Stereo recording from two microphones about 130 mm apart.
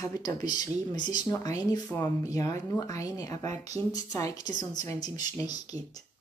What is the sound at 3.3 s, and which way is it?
Speech, 60° right (ahead or behind).